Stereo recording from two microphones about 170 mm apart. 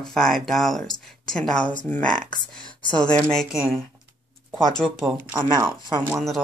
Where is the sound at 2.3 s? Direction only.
30° left (ahead or behind).